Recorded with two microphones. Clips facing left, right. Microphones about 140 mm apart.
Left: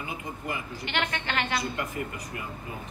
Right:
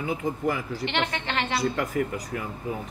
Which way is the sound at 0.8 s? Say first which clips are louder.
Right 2 dB; 30° right (ahead or behind).